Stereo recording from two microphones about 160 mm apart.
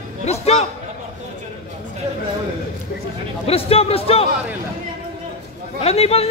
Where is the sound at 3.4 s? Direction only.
40° left (ahead or behind).